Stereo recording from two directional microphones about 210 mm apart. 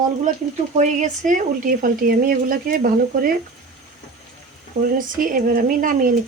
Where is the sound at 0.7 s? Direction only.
35° right (ahead or behind).